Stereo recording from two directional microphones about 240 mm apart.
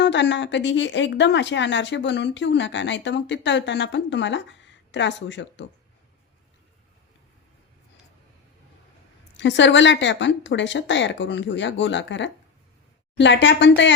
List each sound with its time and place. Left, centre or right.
0.0 s a woman's voice: left
9.4 s a woman's voice: left